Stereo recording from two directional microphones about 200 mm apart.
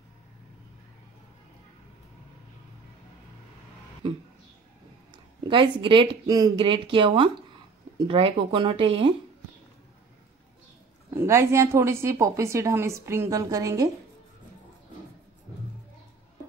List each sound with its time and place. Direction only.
4.0 s speech: 25° right (ahead or behind)
11.1 s a woman's voice: 15° right (ahead or behind)